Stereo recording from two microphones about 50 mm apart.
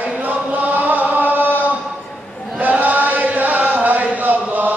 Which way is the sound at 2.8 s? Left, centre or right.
Right.